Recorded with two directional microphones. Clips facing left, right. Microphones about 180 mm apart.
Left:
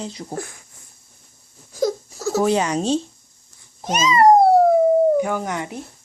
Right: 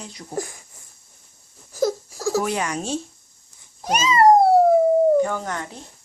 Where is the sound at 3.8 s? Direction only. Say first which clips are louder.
Left 1 dB; 10° right (ahead or behind).